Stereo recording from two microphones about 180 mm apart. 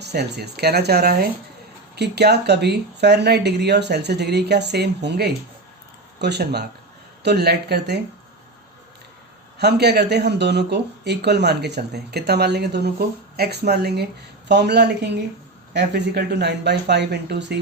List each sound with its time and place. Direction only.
0.0 s speech: 65° right (ahead or behind)
9.6 s speech: 65° right (ahead or behind)